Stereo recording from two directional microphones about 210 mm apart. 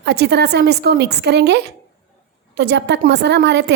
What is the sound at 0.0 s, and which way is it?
A woman's voice, 50° right (ahead or behind).